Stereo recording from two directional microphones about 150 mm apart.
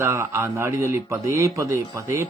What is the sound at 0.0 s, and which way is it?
Speech, 15° right (ahead or behind).